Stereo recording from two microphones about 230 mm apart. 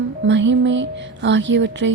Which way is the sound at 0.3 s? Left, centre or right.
Right.